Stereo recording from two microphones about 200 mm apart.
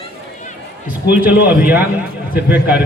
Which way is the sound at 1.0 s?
55° left (ahead or behind).